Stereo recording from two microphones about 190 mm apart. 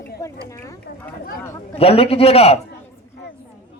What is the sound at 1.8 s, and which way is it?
Speech, 30° left (ahead or behind).